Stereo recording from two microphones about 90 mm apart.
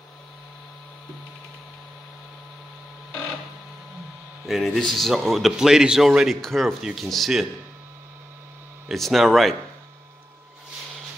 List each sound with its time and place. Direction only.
4.5 s speech: centre (ahead or behind)
8.8 s speech: centre (ahead or behind)